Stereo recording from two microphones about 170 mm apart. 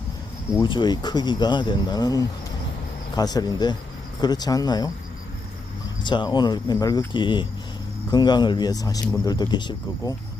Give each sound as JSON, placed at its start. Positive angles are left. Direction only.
{"t": 0.5, "sound": "speech", "side_deg": 25}
{"t": 6.0, "sound": "speech", "side_deg": 25}